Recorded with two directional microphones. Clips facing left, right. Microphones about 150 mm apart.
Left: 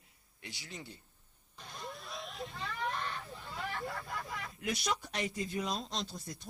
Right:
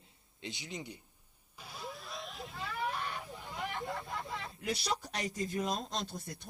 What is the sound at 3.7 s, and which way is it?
Speech, 25° right (ahead or behind).